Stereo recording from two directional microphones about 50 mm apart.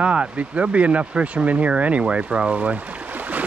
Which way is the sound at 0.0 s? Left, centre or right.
Right.